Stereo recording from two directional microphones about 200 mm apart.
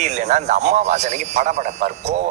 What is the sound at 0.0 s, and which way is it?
Speech, 35° right (ahead or behind).